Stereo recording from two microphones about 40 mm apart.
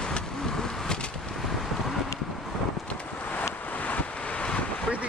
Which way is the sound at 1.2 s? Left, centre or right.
Centre.